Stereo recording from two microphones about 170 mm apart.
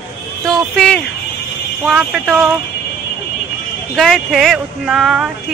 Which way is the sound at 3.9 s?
Centre (ahead or behind).